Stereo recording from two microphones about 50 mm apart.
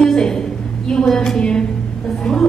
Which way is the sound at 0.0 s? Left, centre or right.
Centre.